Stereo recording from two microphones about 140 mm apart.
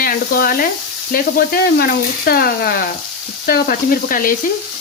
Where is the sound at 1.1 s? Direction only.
90° left.